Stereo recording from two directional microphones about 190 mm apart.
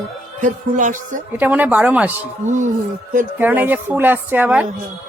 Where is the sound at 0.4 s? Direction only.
40° right (ahead or behind).